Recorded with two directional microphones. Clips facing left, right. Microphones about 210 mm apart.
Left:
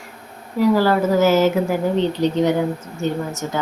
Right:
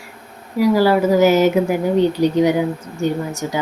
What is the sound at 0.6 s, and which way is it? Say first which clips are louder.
Speech: right 2 dB; 10° right (ahead or behind).